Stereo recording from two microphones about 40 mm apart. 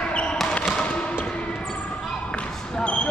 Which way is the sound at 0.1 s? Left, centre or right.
Left.